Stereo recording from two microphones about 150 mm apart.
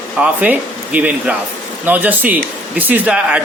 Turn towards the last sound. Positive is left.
turn(degrees=-10)  # may be behind; listen again after turning